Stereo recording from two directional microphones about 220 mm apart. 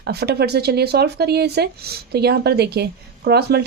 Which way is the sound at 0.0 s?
45° right (ahead or behind).